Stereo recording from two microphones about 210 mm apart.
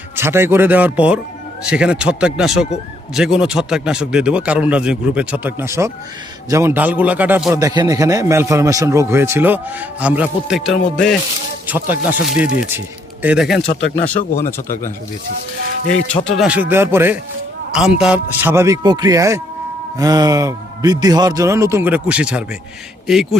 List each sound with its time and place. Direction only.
0.2 s a man's voice: 10° right (ahead or behind)
11.6 s a man's voice: 10° right (ahead or behind)
14.1 s speech: 40° left (ahead or behind)
14.4 s speech: 15° left (ahead or behind)
16.3 s a man's voice: 5° right (ahead or behind)